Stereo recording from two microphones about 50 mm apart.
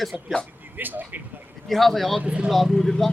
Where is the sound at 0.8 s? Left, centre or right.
Right.